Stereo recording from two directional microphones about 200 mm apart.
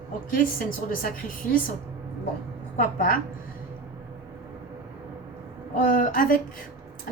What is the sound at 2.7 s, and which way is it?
Speech, 45° left (ahead or behind).